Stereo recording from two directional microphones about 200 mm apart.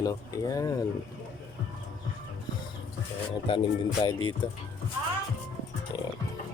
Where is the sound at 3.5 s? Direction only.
25° left (ahead or behind).